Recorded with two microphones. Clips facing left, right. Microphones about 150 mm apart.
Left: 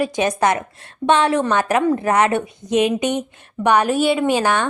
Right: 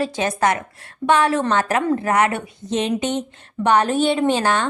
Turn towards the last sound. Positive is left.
turn(degrees=15)  # may be behind; listen again after turning